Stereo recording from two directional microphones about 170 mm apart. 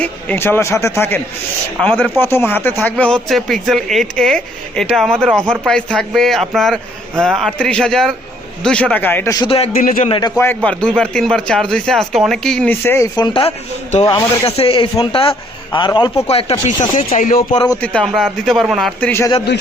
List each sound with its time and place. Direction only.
0.0 s speech: 10° left (ahead or behind)
9.4 s a man's voice: 35° left (ahead or behind)
9.7 s a man's voice: 55° left (ahead or behind)
10.1 s speech: 25° left (ahead or behind)
10.3 s speech: 10° left (ahead or behind)
13.1 s speech: 30° left (ahead or behind)
14.4 s a man's voice: 35° left (ahead or behind)
17.2 s speech: 55° left (ahead or behind)
17.8 s speech: 5° left (ahead or behind)